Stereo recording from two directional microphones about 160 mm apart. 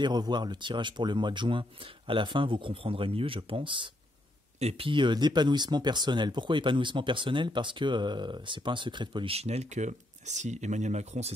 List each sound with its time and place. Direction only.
0.0 s speech: 25° right (ahead or behind); by 11.3 s 45° right (ahead or behind)